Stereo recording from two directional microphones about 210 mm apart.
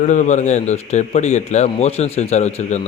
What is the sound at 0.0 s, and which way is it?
A man's voice, 35° left (ahead or behind).